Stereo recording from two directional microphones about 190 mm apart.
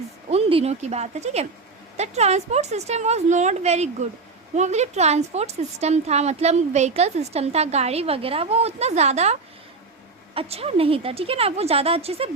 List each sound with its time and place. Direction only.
0.3 s a woman's voice: 30° right (ahead or behind)